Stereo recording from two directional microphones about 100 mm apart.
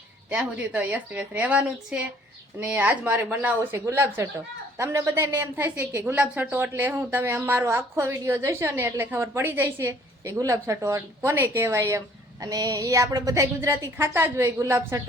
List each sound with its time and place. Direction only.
0.3 s a woman's voice: 15° right (ahead or behind); by 15.0 s 30° right (ahead or behind)